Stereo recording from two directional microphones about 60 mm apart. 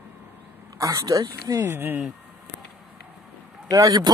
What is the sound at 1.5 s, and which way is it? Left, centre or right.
Speech, right.